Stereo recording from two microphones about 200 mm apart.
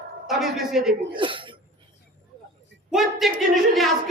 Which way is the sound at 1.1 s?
25° right (ahead or behind).